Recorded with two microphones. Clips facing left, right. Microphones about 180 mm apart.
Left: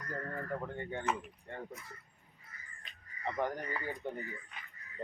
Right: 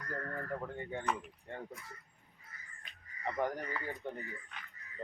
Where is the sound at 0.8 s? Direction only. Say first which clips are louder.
Left 1 dB; 5° right (ahead or behind).